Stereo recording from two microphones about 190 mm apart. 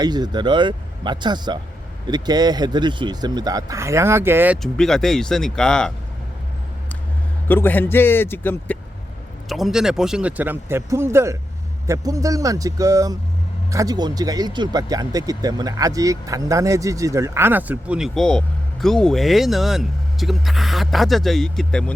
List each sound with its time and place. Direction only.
0.0 s speech: 20° right (ahead or behind); by 5.9 s 5° left (ahead or behind)
7.4 s a man's voice: 10° left (ahead or behind)
9.5 s speech: centre (ahead or behind)